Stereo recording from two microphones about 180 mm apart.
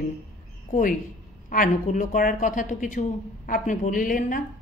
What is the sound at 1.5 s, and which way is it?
Speech, 45° left (ahead or behind).